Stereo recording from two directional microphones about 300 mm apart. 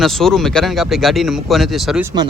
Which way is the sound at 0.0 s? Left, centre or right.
Centre.